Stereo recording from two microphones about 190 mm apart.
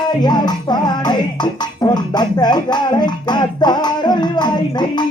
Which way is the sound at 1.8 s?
20° left (ahead or behind).